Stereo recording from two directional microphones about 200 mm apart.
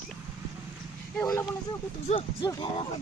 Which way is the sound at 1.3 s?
20° left (ahead or behind).